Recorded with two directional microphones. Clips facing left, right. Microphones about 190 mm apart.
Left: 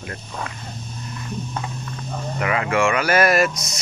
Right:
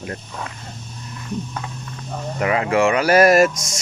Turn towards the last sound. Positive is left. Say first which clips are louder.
# right 5 dB
turn(degrees=-40)  # may be behind; listen again after turning